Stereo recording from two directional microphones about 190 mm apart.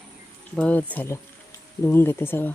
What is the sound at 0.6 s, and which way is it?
Speech, 5° left (ahead or behind).